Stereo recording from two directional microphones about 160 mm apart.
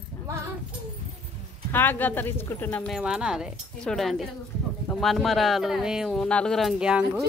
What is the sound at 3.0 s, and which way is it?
Speech, 5° right (ahead or behind).